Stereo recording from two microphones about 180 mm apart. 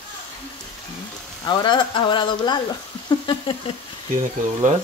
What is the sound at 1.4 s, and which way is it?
Speech, 25° left (ahead or behind).